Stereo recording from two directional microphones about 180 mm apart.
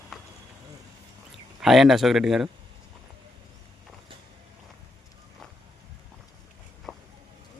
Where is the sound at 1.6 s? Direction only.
Centre (ahead or behind).